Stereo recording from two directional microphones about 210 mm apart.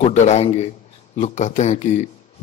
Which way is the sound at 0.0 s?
35° left (ahead or behind).